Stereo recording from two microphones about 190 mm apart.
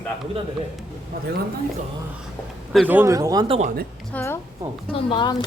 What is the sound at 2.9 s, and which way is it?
Speech, 15° right (ahead or behind).